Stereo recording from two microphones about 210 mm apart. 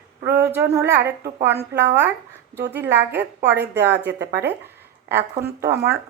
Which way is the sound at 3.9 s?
50° right (ahead or behind).